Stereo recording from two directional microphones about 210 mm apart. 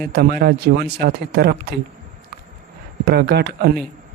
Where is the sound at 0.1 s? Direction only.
50° right (ahead or behind).